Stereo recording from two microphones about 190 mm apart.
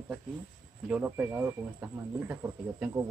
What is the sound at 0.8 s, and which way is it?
Speech, 5° right (ahead or behind).